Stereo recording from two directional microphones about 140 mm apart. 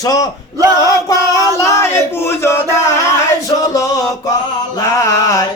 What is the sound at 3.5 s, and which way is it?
Music, 25° left (ahead or behind).